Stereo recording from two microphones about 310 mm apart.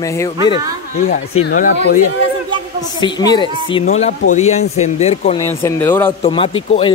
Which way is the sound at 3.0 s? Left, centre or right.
Centre.